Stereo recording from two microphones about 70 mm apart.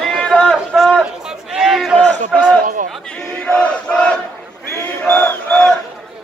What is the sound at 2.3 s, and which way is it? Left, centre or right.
Battle cry, centre.